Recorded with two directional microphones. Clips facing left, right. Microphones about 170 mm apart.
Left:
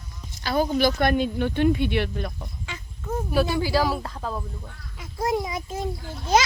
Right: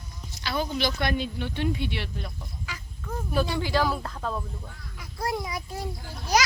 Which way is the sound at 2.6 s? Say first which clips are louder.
Left 2 dB; 25° left (ahead or behind).